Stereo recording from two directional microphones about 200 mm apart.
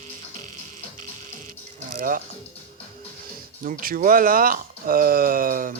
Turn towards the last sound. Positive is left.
turn(degrees=-45)  # may be behind; listen again after turning